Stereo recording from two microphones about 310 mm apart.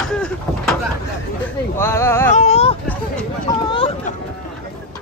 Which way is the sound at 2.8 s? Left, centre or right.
Centre.